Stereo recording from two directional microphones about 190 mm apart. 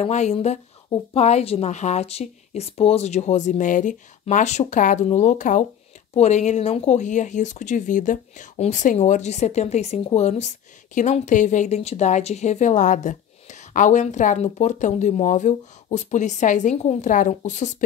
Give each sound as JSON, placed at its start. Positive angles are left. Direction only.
{"t": 0.0, "sound": "a woman's voice", "side_deg": 35}